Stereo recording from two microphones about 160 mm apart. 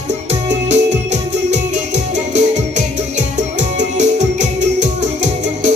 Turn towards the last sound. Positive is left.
turn(degrees=-50)  # may be behind; listen again after turning